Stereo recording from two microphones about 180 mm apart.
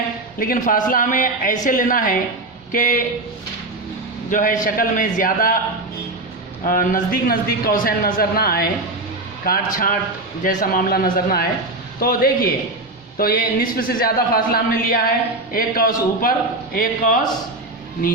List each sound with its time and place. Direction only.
0.3 s a man's voice: 50° left (ahead or behind)
4.3 s a man's voice: 45° left (ahead or behind)
6.7 s a man's voice: 50° left (ahead or behind)
9.7 s a man's voice: 50° left (ahead or behind)